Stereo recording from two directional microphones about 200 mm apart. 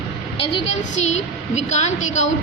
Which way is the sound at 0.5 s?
35° left (ahead or behind).